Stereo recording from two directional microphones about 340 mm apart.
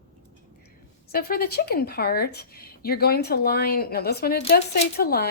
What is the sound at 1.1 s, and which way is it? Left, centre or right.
A woman's voice, left.